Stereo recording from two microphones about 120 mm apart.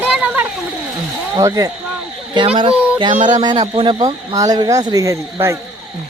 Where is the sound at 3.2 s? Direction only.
90° right.